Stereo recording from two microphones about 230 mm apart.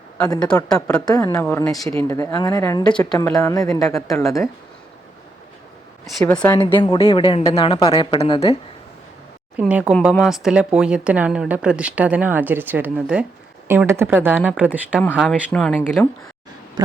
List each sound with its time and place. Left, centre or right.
0.7 s speech: centre
1.0 s speech: centre
6.3 s a woman's voice: centre
9.6 s speech: centre
16.8 s a sound: centre